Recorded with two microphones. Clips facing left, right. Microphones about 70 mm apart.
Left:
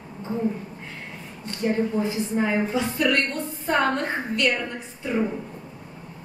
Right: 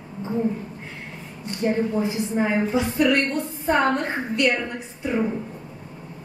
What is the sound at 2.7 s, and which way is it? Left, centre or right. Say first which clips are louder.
A woman's voice: right 3 dB; centre.